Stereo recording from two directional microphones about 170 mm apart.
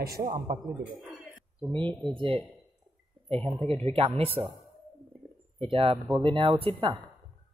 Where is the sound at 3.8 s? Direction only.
35° right (ahead or behind).